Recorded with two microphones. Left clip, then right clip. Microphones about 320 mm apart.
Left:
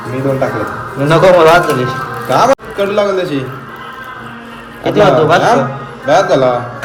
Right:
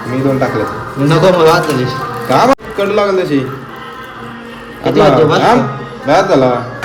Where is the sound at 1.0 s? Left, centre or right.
Centre.